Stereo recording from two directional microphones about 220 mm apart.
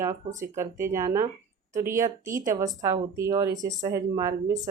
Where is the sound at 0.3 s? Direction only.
10° right (ahead or behind).